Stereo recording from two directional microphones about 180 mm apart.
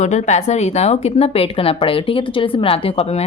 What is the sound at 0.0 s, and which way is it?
A woman's voice, 40° left (ahead or behind).